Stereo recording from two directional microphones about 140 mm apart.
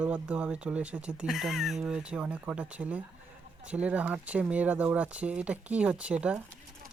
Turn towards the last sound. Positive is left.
turn(degrees=-10)  # may be behind; listen again after turning